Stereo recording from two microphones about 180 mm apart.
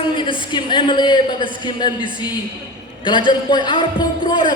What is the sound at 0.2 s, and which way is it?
A man's voice, 25° left (ahead or behind).